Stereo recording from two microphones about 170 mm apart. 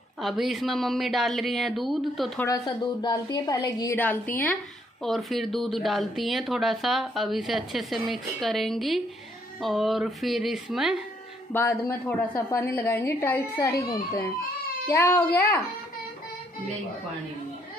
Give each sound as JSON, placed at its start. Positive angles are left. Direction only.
{"t": 0.2, "sound": "speech", "side_deg": 0}
{"t": 2.4, "sound": "a woman's voice", "side_deg": 20}
{"t": 5.0, "sound": "speech", "side_deg": 0}
{"t": 11.5, "sound": "a woman's voice", "side_deg": 15}
{"t": 14.9, "sound": "a woman's voice", "side_deg": 15}